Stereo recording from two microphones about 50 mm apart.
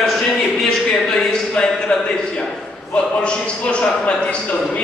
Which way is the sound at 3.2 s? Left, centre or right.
Left.